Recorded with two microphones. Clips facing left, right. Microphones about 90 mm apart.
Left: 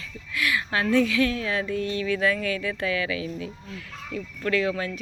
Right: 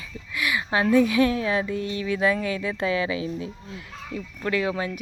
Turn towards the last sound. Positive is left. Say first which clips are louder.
# even
turn(degrees=-20)  # may be behind; listen again after turning